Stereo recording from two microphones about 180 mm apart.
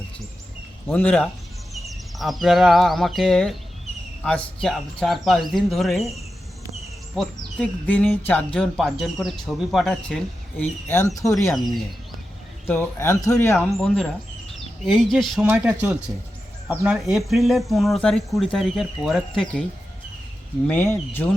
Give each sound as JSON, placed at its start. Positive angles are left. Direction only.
{"t": 0.9, "sound": "speech", "side_deg": 10}
{"t": 7.2, "sound": "speech", "side_deg": 5}
{"t": 10.8, "sound": "speech", "side_deg": 15}
{"t": 12.6, "sound": "speech", "side_deg": 15}
{"t": 13.7, "sound": "speech", "side_deg": 0}
{"t": 20.7, "sound": "speech", "side_deg": 15}